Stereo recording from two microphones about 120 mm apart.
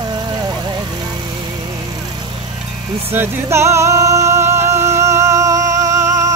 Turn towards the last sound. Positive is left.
turn(degrees=-30)  # may be behind; listen again after turning